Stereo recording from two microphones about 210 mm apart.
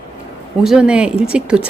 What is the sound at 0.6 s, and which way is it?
Speech, 5° right (ahead or behind).